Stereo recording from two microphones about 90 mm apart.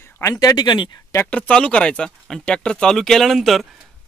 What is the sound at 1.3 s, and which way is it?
Speech, 10° left (ahead or behind).